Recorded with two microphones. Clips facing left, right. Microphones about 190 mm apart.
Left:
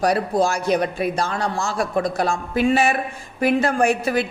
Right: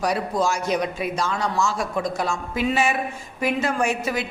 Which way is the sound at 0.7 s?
60° left (ahead or behind).